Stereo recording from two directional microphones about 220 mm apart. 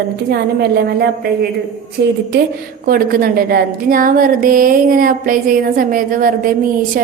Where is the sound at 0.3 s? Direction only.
45° right (ahead or behind).